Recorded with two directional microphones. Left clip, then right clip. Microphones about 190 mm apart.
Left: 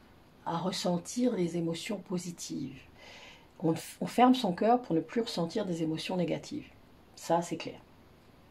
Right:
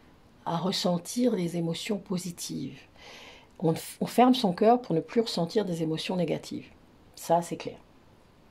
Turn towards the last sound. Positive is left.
turn(degrees=-40)  # may be behind; listen again after turning